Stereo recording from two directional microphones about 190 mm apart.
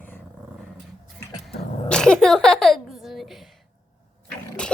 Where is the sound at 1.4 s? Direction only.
5° left (ahead or behind).